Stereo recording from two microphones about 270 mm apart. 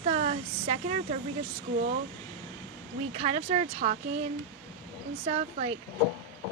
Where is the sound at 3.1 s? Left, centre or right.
Right.